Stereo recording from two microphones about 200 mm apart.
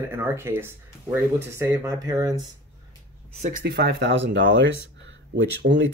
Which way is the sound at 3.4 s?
50° right (ahead or behind).